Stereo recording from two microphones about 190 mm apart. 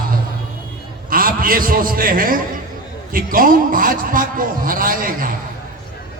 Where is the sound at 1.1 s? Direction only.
50° right (ahead or behind).